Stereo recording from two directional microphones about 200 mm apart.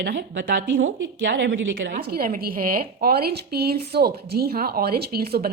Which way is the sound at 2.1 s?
45° right (ahead or behind).